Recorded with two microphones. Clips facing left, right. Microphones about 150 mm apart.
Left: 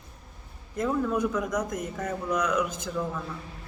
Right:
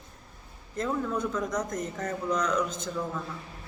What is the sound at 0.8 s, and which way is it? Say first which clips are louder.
A man's voice: left 3 dB; 5° left (ahead or behind).